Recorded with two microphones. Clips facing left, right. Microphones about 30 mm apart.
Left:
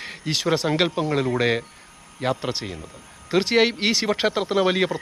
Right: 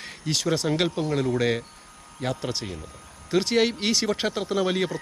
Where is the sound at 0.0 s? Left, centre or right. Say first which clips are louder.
Left 2 dB; centre.